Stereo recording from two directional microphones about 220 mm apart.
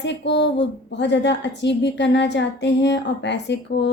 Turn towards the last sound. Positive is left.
turn(degrees=50)  # may be behind; listen again after turning